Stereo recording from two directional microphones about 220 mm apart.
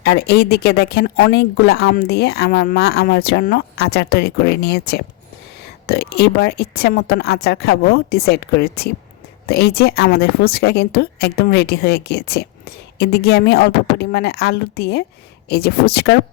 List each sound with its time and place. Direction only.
0.0 s a woman's voice: 45° left (ahead or behind)